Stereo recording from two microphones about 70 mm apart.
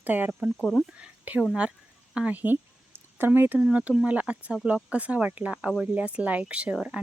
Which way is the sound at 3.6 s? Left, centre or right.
Centre.